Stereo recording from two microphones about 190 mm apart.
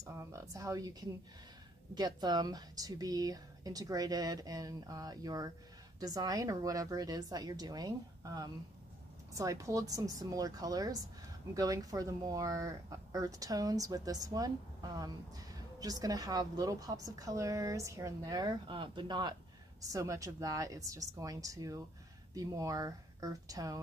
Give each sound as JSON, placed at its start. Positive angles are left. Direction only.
{"t": 0.0, "sound": "a woman's voice", "side_deg": -15}
{"t": 2.0, "sound": "a woman's voice", "side_deg": -20}